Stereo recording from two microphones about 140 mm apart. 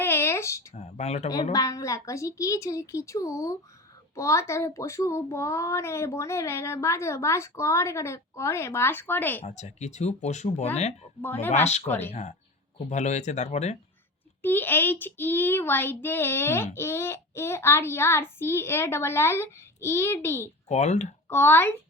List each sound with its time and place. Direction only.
0.0 s a sound: 15° left (ahead or behind)
0.7 s a sound: 55° left (ahead or behind)
1.5 s a child's voice: 25° left (ahead or behind)
9.4 s speech: 55° left (ahead or behind)
11.2 s child singing: 15° left (ahead or behind)
11.5 s speech: 50° left (ahead or behind)
11.9 s child singing: 15° left (ahead or behind)
12.9 s speech: 55° left (ahead or behind)
14.4 s child singing: 15° left (ahead or behind)
20.7 s speech: 55° left (ahead or behind)
21.2 s a child's voice: 15° left (ahead or behind)